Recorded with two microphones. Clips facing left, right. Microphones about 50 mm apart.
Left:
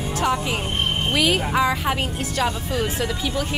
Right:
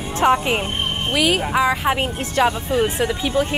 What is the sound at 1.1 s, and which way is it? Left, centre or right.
A woman's voice, centre.